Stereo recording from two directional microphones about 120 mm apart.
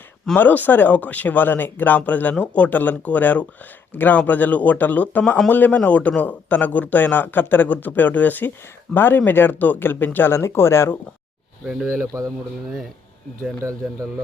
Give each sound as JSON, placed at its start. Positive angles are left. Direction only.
{"t": 0.3, "sound": "a man's voice", "side_deg": 15}
{"t": 11.6, "sound": "speech", "side_deg": -5}
{"t": 11.9, "sound": "speech", "side_deg": -25}